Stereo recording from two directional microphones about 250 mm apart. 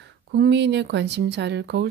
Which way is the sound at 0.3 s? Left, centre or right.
Right.